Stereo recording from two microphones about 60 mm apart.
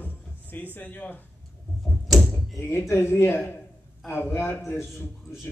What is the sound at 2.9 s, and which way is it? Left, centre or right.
Speech, left.